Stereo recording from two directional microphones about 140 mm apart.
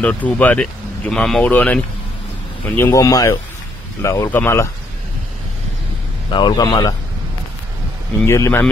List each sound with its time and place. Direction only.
0.0 s speech: 10° left (ahead or behind)
6.3 s speech: 30° left (ahead or behind)
8.3 s speech: 20° left (ahead or behind)